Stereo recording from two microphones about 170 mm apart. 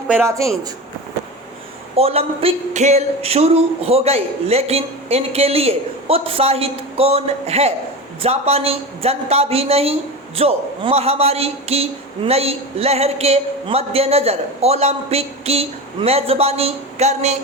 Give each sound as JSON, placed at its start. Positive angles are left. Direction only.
{"t": 0.3, "sound": "speech", "side_deg": -20}
{"t": 2.0, "sound": "a man's voice", "side_deg": -35}